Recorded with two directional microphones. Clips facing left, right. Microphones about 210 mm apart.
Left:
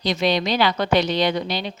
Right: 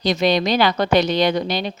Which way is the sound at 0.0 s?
45° right (ahead or behind).